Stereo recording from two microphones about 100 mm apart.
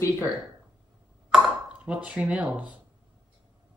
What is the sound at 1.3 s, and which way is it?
Speech, 10° right (ahead or behind).